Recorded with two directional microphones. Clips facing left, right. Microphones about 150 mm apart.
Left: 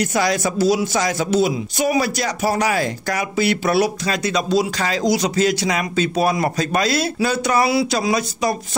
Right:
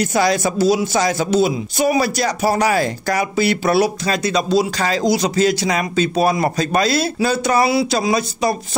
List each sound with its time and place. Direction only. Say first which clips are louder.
0.0 s speech: right 2 dB; 30° right (ahead or behind)